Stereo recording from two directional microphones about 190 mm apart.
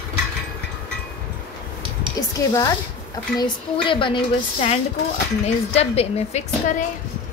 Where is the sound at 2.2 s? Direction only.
20° left (ahead or behind).